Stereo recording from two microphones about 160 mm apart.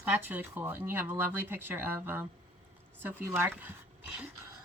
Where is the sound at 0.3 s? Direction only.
10° right (ahead or behind).